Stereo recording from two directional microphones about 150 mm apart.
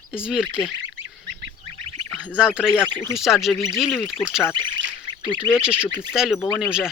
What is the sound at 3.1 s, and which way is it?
Speech, centre (ahead or behind).